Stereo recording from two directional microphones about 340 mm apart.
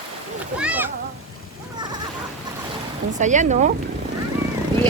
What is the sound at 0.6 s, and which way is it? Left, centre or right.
Speech, centre.